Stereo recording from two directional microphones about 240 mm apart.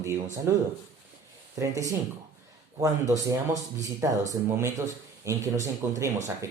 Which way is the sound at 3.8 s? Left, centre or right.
Centre.